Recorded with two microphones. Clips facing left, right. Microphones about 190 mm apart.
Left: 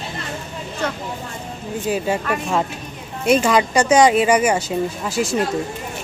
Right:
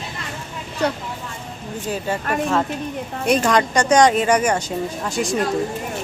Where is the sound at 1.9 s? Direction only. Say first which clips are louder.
Left 4 dB; 10° left (ahead or behind).